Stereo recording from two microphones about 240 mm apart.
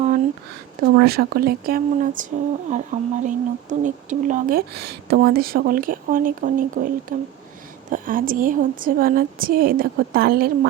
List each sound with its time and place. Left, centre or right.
0.8 s speech: right